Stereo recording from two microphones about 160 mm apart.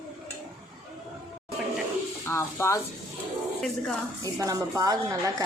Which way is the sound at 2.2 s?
15° left (ahead or behind).